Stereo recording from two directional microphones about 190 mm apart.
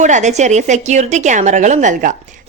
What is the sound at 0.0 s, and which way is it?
A woman's voice, 40° right (ahead or behind).